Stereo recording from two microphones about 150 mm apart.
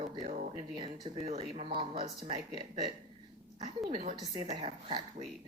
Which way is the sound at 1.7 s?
30° right (ahead or behind).